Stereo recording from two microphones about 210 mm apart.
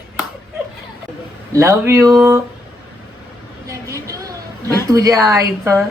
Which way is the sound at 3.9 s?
15° right (ahead or behind).